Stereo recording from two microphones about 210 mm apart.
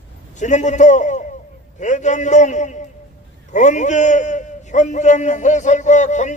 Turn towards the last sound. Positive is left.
turn(degrees=35)  # may be behind; listen again after turning